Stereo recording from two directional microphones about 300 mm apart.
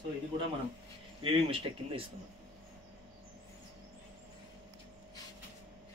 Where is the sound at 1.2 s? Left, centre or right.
Centre.